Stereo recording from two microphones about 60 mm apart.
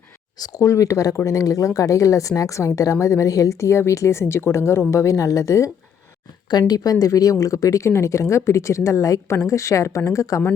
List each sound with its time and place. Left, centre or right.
0.4 s speech: left
6.7 s speech: left